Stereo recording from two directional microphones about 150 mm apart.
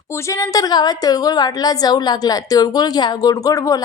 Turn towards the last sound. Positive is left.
turn(degrees=25)  # may be behind; listen again after turning